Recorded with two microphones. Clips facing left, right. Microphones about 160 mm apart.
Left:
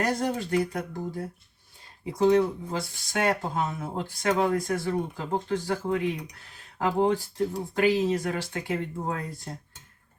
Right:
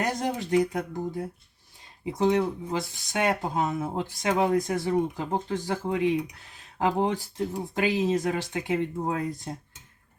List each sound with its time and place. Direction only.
0.0 s speech: 20° right (ahead or behind)